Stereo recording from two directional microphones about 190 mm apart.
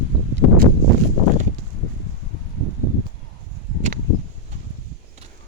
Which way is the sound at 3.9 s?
40° right (ahead or behind).